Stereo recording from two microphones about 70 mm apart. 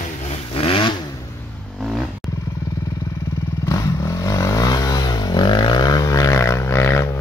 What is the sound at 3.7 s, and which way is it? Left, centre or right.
Vehicle, left.